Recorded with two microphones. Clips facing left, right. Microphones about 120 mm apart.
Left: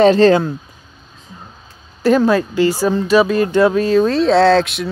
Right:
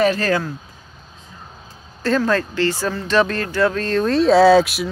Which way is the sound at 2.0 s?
15° left (ahead or behind).